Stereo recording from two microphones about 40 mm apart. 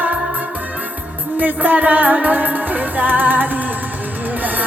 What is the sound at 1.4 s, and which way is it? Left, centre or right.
Music, right.